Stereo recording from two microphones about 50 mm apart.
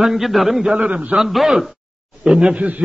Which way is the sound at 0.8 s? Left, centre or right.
Right.